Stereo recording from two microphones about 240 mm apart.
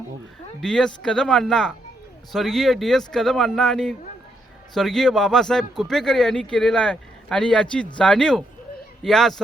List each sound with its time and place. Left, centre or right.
0.6 s speech: centre